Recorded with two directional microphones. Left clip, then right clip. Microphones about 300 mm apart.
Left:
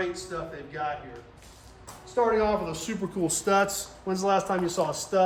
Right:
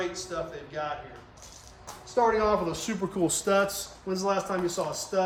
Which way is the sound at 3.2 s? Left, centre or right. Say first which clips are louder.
Left 1 dB; centre.